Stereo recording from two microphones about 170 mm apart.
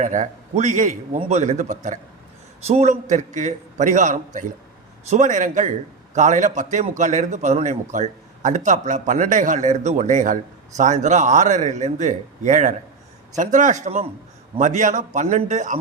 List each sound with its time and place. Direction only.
0.0 s a man's voice: 45° right (ahead or behind)